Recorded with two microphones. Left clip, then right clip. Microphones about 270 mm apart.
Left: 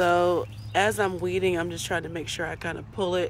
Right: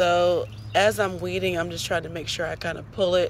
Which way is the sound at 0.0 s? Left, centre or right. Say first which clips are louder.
Right 2 dB; centre.